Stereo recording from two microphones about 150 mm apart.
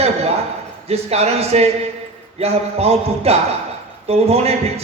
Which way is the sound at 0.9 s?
45° right (ahead or behind).